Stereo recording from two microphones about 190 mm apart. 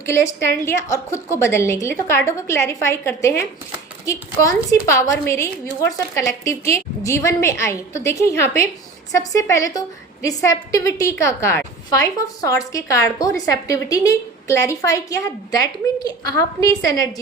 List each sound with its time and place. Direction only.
0.0 s a woman's voice: 15° left (ahead or behind)